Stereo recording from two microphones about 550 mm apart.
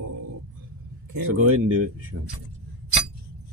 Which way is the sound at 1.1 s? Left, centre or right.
Right.